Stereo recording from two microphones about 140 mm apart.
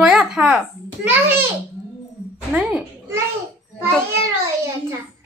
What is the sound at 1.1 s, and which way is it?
Speech, 15° right (ahead or behind).